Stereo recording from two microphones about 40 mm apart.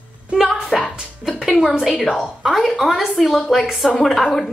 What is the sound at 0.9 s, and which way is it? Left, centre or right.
Music, centre.